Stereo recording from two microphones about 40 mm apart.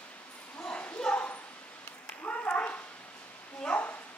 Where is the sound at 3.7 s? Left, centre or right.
Left.